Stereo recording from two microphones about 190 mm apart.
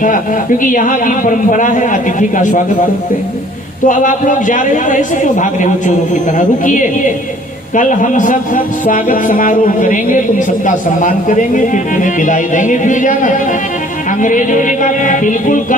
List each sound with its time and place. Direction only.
0.6 s speech: 45° left (ahead or behind)
3.8 s speech: 45° left (ahead or behind)